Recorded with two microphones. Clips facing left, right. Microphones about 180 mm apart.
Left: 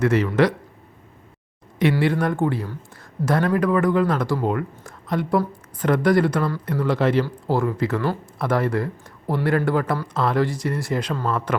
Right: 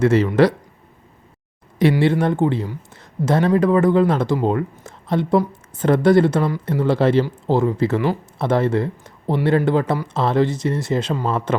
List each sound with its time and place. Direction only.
0.0 s speech: 25° right (ahead or behind)
1.8 s speech: 30° right (ahead or behind)